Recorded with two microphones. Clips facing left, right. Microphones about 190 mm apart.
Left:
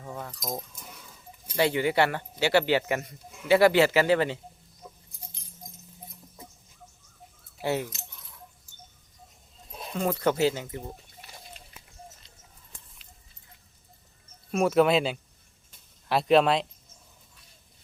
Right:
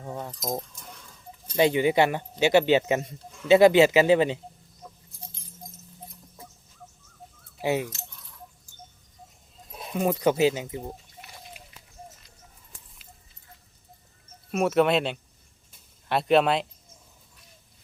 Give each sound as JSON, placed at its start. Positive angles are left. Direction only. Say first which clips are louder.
{"t": 0.0, "sound": "cutlery", "louder": "right 3 dB", "side_deg": -25}
{"t": 0.8, "sound": "a sound", "louder": "right 1 dB", "side_deg": 5}
{"t": 1.5, "sound": "speech", "louder": "right 3 dB", "side_deg": -20}
{"t": 7.6, "sound": "speech", "louder": "right 2 dB", "side_deg": -15}
{"t": 9.9, "sound": "speech", "louder": "right 3 dB", "side_deg": -15}
{"t": 11.6, "sound": "a sound", "louder": "right 2 dB", "side_deg": -10}
{"t": 14.5, "sound": "speech", "louder": "even", "side_deg": 0}